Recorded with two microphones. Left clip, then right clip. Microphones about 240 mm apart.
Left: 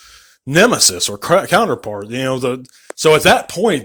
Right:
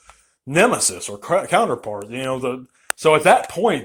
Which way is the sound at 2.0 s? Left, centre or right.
Left.